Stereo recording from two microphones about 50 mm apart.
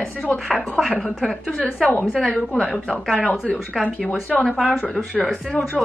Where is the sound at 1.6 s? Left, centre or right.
Centre.